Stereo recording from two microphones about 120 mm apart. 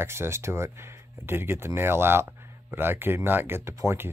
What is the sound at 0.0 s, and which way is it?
Speech, 20° right (ahead or behind).